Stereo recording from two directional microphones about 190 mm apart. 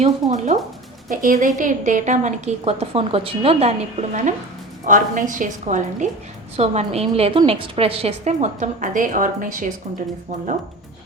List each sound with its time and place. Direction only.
0.0 s a woman's voice: 40° right (ahead or behind)